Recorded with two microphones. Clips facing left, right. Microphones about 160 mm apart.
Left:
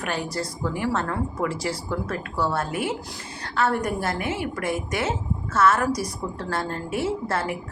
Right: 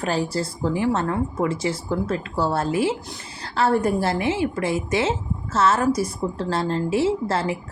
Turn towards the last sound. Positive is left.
turn(degrees=-25)  # may be behind; listen again after turning